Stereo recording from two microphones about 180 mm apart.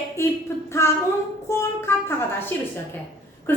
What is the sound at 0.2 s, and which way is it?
Speech, 15° left (ahead or behind).